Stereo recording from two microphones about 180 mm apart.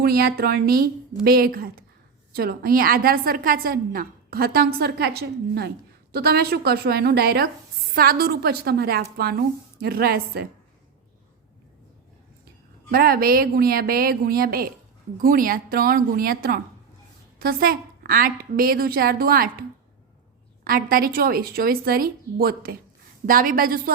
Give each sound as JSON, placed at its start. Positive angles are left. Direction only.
{"t": 0.0, "sound": "a woman's voice", "side_deg": -60}
{"t": 12.9, "sound": "a woman's voice", "side_deg": -55}
{"t": 20.7, "sound": "a woman's voice", "side_deg": -55}